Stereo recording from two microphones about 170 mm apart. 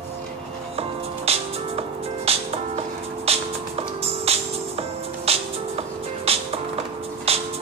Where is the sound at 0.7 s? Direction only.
35° right (ahead or behind).